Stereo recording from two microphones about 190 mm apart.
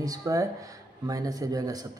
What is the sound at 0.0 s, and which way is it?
Speech, 20° right (ahead or behind).